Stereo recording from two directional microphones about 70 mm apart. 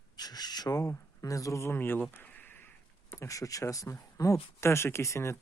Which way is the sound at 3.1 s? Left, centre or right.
Left.